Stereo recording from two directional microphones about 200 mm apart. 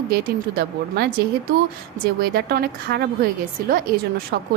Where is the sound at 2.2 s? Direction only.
50° right (ahead or behind).